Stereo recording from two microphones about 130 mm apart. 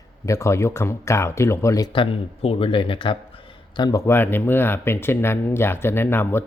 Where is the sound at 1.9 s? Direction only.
45° left (ahead or behind).